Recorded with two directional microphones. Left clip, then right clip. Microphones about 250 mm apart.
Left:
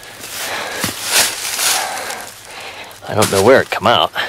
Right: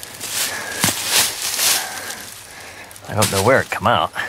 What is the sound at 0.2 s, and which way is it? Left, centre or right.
Walk, centre.